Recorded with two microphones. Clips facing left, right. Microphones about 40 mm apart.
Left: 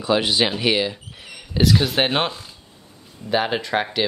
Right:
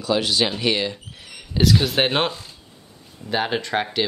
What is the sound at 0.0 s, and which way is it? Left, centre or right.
Speech, left.